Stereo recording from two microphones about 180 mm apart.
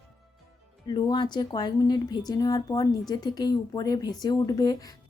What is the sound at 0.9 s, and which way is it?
A woman's voice, 25° left (ahead or behind).